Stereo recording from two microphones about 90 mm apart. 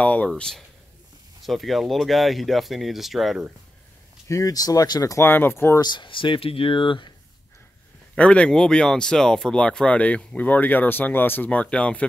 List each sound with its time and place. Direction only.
0.0 s speech: 15° left (ahead or behind)
0.3 s speech: 5° left (ahead or behind)
4.3 s speech: 40° left (ahead or behind)
5.1 s speech: 25° left (ahead or behind)
5.8 s speech: 55° left (ahead or behind)
8.2 s speech: 15° left (ahead or behind)